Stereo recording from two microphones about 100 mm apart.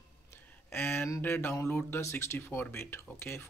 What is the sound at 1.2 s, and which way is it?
Speech, 20° left (ahead or behind).